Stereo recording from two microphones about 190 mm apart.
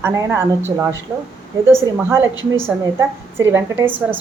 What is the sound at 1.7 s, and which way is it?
A woman's voice, 10° right (ahead or behind).